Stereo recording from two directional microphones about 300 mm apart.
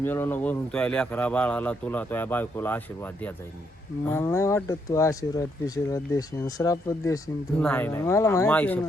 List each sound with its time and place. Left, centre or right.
0.0 s speech: centre